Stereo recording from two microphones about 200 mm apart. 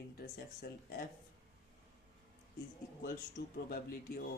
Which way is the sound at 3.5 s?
45° left (ahead or behind).